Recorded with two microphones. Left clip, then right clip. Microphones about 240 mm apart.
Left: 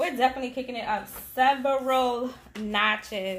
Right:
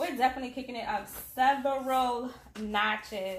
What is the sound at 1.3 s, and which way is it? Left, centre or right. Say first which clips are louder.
Speech: left 4 dB; left.